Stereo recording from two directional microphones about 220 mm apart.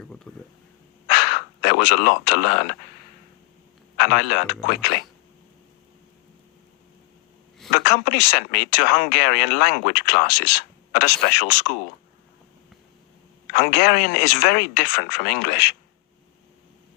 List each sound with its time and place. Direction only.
0.3 s speech: 5° left (ahead or behind)
1.0 s speech: 45° left (ahead or behind)
3.9 s speech: 45° left (ahead or behind)
7.7 s speech: 45° left (ahead or behind)
13.5 s speech: 45° left (ahead or behind)